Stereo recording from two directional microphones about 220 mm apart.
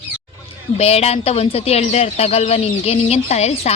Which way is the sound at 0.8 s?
30° left (ahead or behind).